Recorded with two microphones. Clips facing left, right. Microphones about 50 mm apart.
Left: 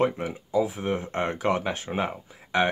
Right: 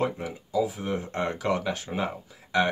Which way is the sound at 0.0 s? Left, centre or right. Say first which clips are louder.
Left 4 dB; left.